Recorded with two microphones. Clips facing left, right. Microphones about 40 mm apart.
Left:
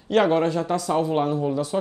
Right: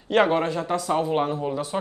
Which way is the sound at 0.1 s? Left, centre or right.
Centre.